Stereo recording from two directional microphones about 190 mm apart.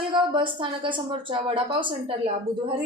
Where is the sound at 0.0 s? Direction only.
25° right (ahead or behind).